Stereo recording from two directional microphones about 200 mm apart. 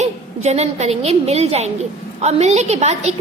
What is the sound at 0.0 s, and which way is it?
A woman's voice, 35° right (ahead or behind).